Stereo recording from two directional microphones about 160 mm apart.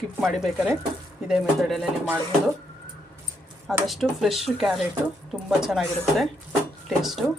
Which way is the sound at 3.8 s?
Centre (ahead or behind).